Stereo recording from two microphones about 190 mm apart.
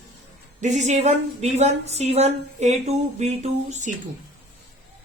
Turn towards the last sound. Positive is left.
turn(degrees=-35)  # may be behind; listen again after turning